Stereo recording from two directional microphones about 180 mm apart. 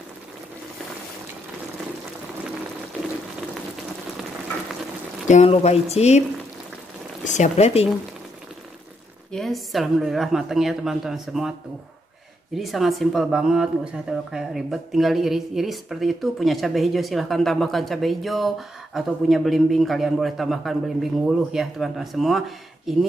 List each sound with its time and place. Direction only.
5.3 s speech: 35° left (ahead or behind)
7.2 s speech: 40° left (ahead or behind)
9.3 s speech: centre (ahead or behind)
12.5 s speech: centre (ahead or behind)